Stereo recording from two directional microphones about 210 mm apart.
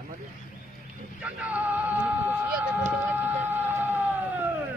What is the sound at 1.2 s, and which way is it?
Vehicle, 5° right (ahead or behind).